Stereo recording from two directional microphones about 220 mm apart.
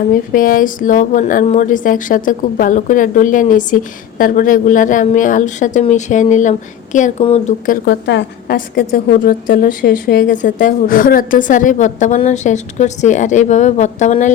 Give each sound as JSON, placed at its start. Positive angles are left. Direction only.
{"t": 0.1, "sound": "a woman's voice", "side_deg": 40}
{"t": 7.9, "sound": "a woman's voice", "side_deg": 50}